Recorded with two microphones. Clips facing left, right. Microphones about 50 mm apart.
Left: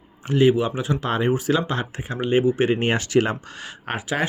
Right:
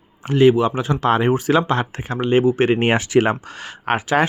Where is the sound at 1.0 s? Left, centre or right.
Right.